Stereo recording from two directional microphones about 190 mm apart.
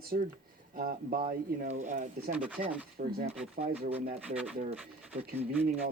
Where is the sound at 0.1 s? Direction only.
50° right (ahead or behind).